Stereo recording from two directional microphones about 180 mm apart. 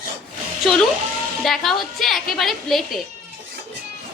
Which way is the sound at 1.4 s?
Centre (ahead or behind).